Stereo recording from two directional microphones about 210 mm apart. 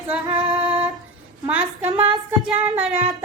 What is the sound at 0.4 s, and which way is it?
Music, 20° right (ahead or behind).